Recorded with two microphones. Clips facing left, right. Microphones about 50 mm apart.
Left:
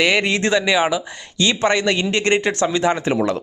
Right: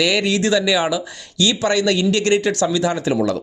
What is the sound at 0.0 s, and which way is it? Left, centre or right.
Speech, left.